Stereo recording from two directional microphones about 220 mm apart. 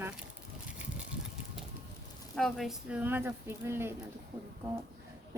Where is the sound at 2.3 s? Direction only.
Centre (ahead or behind).